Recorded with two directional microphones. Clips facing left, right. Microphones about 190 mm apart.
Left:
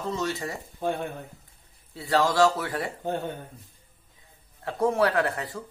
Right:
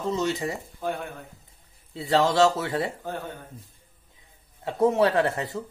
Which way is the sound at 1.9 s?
25° right (ahead or behind).